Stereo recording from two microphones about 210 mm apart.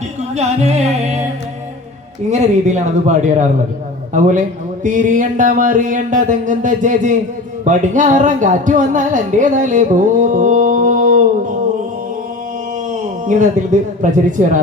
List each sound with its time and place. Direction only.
0.3 s music: 30° right (ahead or behind)
2.3 s speech: 35° right (ahead or behind)
13.2 s speech: 35° right (ahead or behind)